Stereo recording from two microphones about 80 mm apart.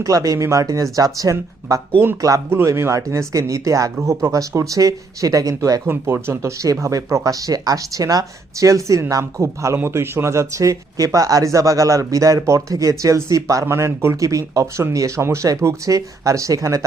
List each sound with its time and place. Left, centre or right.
0.0 s speech: right
5.8 s speech: right